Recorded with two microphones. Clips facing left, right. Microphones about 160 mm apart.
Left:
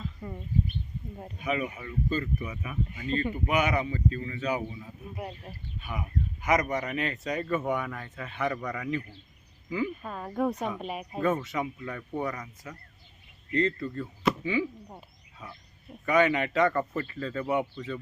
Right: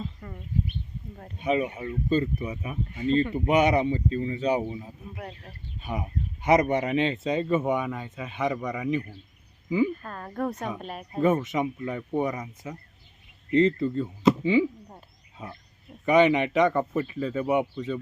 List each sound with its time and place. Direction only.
0.2 s speech: 15° left (ahead or behind)
1.4 s speech: 30° right (ahead or behind)
5.1 s speech: 5° left (ahead or behind)
5.8 s speech: 30° right (ahead or behind)
9.9 s speech: 5° left (ahead or behind)
11.2 s speech: 20° right (ahead or behind)
16.0 s speech: 20° right (ahead or behind)